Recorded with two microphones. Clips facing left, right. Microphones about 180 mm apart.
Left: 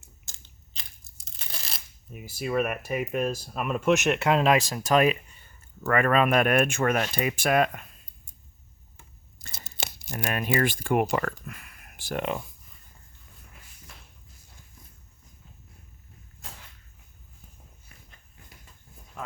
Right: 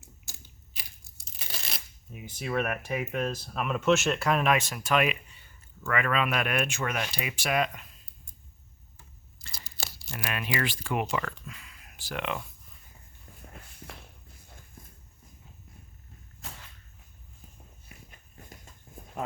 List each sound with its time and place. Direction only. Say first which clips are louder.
1.5 s a sound: right 1 dB; centre (ahead or behind)
2.2 s speech: left 3 dB; 10° left (ahead or behind); by 7.9 s 50° left (ahead or behind)
9.5 s tearing: left 3 dB; 25° left (ahead or behind)
10.2 s speech: left 6 dB; 45° left (ahead or behind)
13.5 s walk: right 8 dB; 60° right (ahead or behind)
18.3 s a sound: right 6 dB; 45° right (ahead or behind)